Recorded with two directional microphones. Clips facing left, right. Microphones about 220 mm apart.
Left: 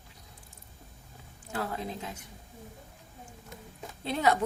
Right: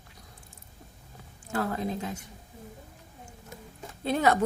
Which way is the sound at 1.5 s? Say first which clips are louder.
Right 4 dB; 45° right (ahead or behind).